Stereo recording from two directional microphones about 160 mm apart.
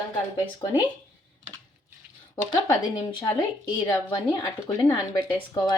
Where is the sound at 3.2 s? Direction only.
25° left (ahead or behind).